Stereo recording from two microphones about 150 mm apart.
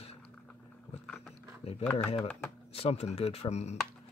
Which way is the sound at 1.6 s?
45° left (ahead or behind).